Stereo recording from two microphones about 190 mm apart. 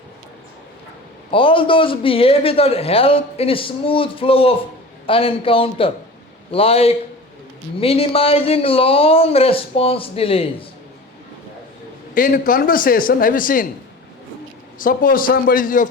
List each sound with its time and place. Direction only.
1.3 s a man's voice: 25° left (ahead or behind)
12.1 s a man's voice: 45° left (ahead or behind)
14.8 s a man's voice: 45° left (ahead or behind)